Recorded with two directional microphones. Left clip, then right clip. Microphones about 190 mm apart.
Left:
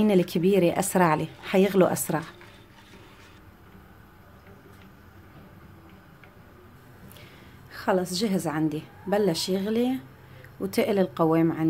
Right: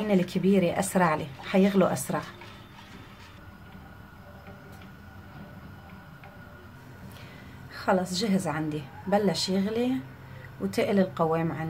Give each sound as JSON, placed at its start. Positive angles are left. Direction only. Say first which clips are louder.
{"t": 0.0, "sound": "speech", "louder": "left 4 dB", "side_deg": 35}
{"t": 7.7, "sound": "a woman's voice", "louder": "left 1 dB", "side_deg": 30}